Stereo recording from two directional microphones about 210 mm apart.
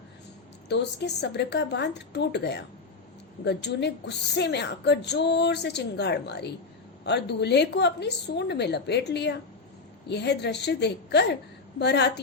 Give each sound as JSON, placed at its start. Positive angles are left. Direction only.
{"t": 0.7, "sound": "a woman's voice", "side_deg": 55}